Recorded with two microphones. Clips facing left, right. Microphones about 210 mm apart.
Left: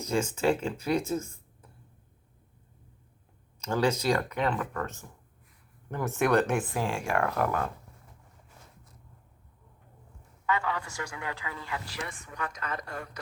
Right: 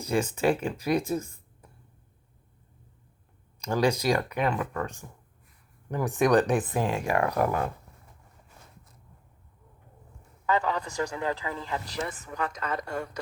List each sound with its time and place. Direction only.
0.2 s a man's voice: 35° right (ahead or behind)
0.4 s speech: 15° right (ahead or behind)
3.6 s speech: 15° right (ahead or behind)
10.4 s a man's voice: 35° right (ahead or behind)